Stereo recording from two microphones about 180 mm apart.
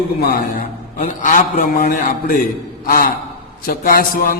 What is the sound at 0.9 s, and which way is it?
A man's voice, 45° left (ahead or behind).